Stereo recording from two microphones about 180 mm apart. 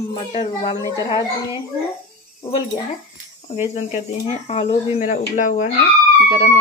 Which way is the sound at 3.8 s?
40° left (ahead or behind).